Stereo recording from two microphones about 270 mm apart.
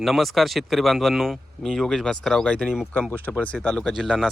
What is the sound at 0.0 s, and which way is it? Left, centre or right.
Speech, centre.